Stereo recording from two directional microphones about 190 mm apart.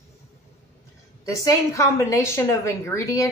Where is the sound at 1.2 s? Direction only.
15° left (ahead or behind).